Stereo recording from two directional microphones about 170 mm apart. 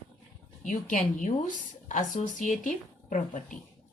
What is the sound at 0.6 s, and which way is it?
A woman's voice, 50° left (ahead or behind).